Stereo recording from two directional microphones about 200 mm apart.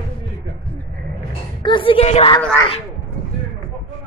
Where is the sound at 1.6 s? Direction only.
25° left (ahead or behind).